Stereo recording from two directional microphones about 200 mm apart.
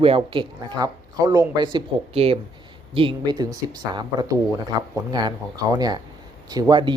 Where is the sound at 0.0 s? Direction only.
25° right (ahead or behind).